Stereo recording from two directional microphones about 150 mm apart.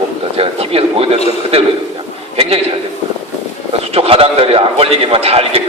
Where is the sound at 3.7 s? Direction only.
40° right (ahead or behind).